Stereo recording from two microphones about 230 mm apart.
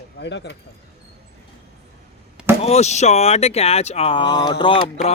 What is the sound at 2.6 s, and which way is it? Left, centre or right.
Speech, left.